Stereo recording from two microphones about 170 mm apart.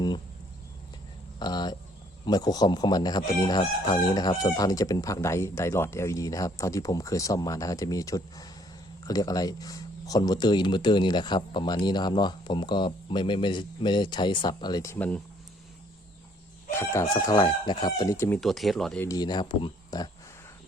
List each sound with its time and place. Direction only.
1.4 s chicken: 25° left (ahead or behind)
16.8 s chicken: 20° left (ahead or behind)
18.3 s speech: centre (ahead or behind)
19.0 s chicken: 20° left (ahead or behind)